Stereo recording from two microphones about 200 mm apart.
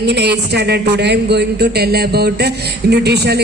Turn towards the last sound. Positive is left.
turn(degrees=-55)  # may be behind; listen again after turning